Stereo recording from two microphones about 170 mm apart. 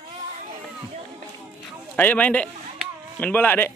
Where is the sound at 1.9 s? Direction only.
10° left (ahead or behind).